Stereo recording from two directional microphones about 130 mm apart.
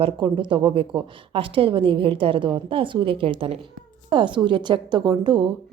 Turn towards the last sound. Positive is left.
turn(degrees=-35)  # may be behind; listen again after turning